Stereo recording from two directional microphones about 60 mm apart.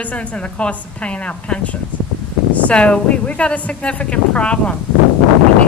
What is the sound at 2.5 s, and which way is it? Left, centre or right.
Speech, left.